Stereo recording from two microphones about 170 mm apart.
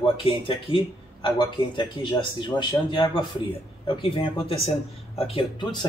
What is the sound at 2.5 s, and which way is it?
Speech, 25° left (ahead or behind).